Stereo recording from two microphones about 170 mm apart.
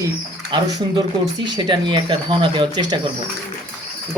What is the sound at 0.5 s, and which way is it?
Speech, 25° right (ahead or behind).